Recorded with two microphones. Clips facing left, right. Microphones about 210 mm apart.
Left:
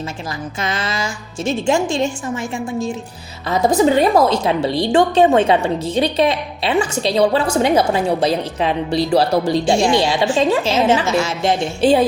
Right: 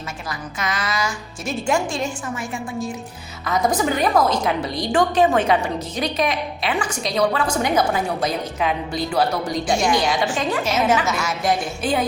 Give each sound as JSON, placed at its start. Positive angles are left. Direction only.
{"t": 0.6, "sound": "a woman's voice", "side_deg": 25}